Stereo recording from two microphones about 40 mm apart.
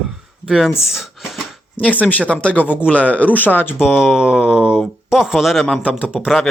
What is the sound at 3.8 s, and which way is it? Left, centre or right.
Speech, centre.